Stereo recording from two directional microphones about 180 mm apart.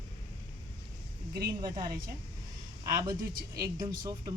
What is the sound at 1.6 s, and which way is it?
Speech, 20° right (ahead or behind).